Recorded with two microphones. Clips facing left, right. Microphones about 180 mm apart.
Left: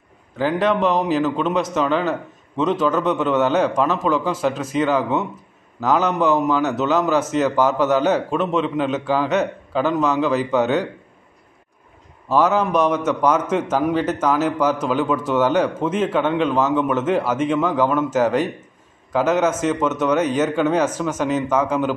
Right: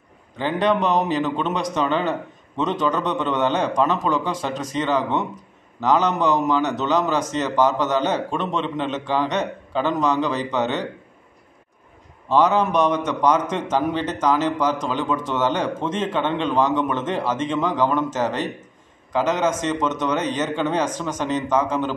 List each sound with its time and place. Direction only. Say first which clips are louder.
0.4 s a man's voice: left 2 dB; centre (ahead or behind)
12.3 s a man's voice: left 1 dB; 5° left (ahead or behind)